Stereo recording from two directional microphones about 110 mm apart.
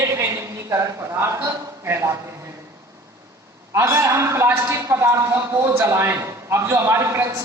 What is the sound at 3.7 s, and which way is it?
Speech, 25° right (ahead or behind).